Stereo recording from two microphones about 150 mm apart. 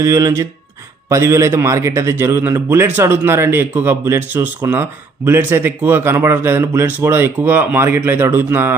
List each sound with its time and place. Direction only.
0.0 s speech: 20° right (ahead or behind)